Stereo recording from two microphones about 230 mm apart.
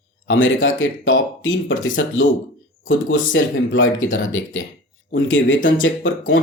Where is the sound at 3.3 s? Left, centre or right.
Left.